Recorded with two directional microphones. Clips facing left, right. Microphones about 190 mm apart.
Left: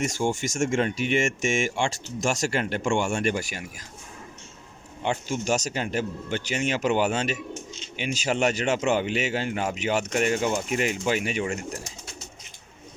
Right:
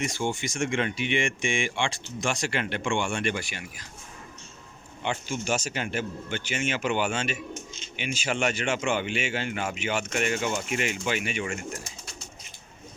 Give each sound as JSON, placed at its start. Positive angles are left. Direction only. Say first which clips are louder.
{"t": 0.0, "sound": "speech", "louder": "left 3 dB", "side_deg": 45}
{"t": 5.0, "sound": "speech", "louder": "left 3 dB", "side_deg": 40}